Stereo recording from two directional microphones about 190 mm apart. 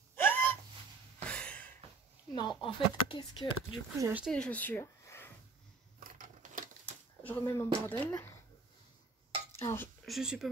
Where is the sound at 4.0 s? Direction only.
10° right (ahead or behind).